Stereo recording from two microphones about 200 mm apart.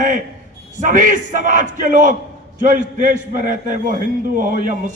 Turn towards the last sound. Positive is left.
turn(degrees=-40)  # may be behind; listen again after turning